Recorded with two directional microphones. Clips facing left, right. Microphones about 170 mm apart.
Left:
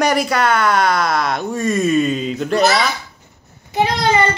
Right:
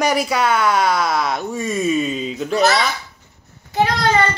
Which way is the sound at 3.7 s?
20° left (ahead or behind).